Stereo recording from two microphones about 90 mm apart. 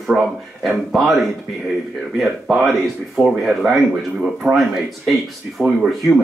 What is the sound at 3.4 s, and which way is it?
Speech, centre (ahead or behind).